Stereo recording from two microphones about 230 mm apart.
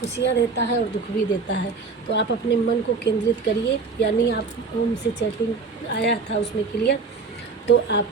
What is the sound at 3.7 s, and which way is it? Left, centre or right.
Speech, left.